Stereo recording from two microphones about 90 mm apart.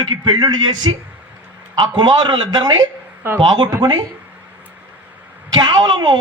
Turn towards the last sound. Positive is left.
turn(degrees=-55)  # may be behind; listen again after turning